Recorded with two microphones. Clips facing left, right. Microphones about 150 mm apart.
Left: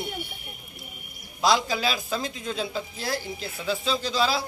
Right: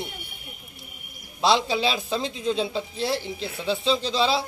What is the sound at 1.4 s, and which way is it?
A man's voice, 25° right (ahead or behind).